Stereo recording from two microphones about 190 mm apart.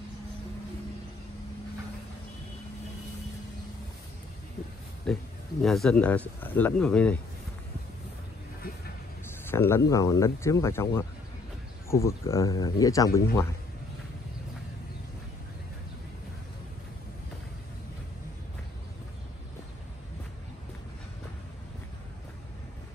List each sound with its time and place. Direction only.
5.1 s speech: 5° left (ahead or behind)
9.5 s speech: 15° left (ahead or behind)